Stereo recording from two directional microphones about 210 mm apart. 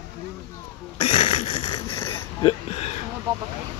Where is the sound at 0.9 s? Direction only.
25° left (ahead or behind).